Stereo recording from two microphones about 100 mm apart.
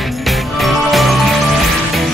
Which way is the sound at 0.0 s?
Centre (ahead or behind).